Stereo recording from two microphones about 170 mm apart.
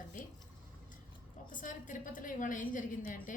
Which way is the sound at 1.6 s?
50° left (ahead or behind).